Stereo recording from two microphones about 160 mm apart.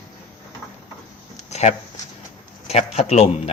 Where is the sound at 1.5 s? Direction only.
45° left (ahead or behind).